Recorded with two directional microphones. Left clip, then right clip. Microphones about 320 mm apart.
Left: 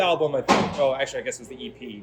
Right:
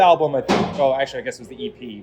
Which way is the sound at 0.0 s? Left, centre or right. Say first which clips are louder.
Right 7 dB; centre.